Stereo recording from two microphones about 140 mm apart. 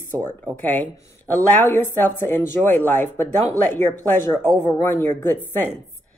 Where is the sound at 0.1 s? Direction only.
15° left (ahead or behind).